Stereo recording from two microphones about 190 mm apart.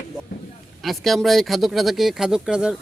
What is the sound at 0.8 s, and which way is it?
Speech, centre (ahead or behind).